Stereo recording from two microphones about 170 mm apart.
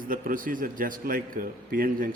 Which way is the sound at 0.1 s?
55° right (ahead or behind).